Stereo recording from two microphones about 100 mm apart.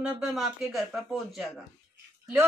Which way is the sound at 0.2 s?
5° right (ahead or behind).